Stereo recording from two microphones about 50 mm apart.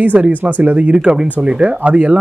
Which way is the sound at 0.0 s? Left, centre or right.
Right.